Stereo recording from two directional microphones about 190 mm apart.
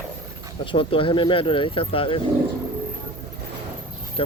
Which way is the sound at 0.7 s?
25° left (ahead or behind).